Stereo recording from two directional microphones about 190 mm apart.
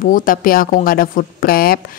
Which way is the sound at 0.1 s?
45° left (ahead or behind).